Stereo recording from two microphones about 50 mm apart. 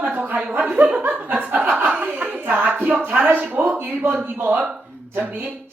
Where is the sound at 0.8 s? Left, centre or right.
Right.